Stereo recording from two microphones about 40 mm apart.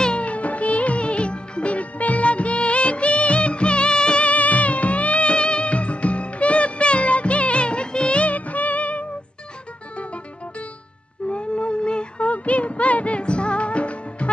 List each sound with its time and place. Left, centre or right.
0.2 s music: left
4.2 s music: left
11.2 s a sound: left
12.3 s music: left